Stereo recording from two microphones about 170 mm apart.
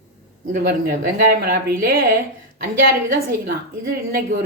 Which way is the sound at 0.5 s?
60° right (ahead or behind).